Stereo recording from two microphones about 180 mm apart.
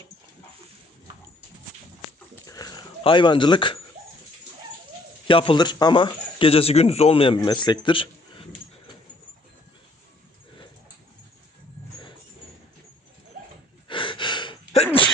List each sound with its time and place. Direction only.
2.5 s dog: 20° left (ahead or behind)
5.3 s speech: 30° left (ahead or behind)
13.8 s gasp: 25° left (ahead or behind)